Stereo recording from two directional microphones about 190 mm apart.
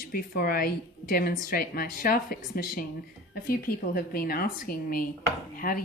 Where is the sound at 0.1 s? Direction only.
50° left (ahead or behind).